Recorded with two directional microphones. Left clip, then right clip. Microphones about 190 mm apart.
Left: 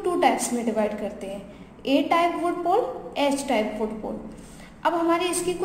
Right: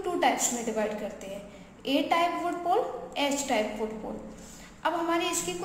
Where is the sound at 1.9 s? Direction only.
15° left (ahead or behind).